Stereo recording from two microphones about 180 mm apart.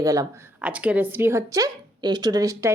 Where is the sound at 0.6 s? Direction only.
5° right (ahead or behind).